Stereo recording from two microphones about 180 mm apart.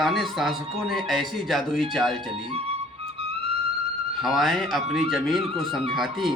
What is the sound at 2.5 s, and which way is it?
Flute, 35° right (ahead or behind).